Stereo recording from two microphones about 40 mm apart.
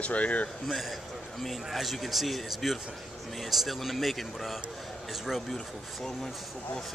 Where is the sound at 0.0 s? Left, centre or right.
Left.